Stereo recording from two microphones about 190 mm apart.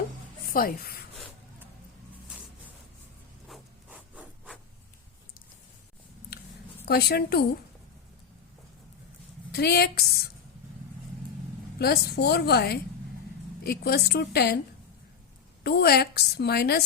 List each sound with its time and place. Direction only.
0.5 s speech: 50° left (ahead or behind)
3.5 s rub: 5° right (ahead or behind)
6.8 s a woman's voice: 55° left (ahead or behind)
9.5 s a woman's voice: 60° left (ahead or behind)
11.8 s a woman's voice: 55° left (ahead or behind)
15.6 s a woman's voice: 55° left (ahead or behind)